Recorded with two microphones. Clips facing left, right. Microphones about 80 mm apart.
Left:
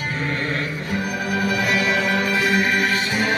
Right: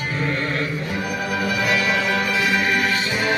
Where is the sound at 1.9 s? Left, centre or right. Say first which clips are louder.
Left 1 dB; left.